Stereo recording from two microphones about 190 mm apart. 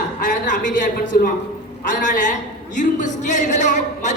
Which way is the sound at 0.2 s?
40° left (ahead or behind).